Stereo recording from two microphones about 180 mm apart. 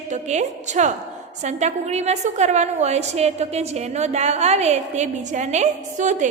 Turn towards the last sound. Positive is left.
turn(degrees=-40)  # may be behind; listen again after turning